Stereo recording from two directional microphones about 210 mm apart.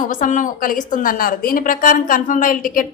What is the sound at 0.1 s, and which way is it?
A woman's voice, 40° left (ahead or behind).